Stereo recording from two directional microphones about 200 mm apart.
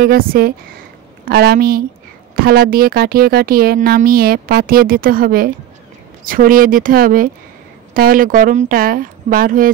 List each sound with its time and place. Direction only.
0.0 s speech: 50° right (ahead or behind)